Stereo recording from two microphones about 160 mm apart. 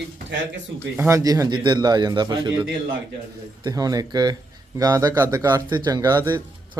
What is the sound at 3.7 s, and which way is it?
Speech, 25° right (ahead or behind).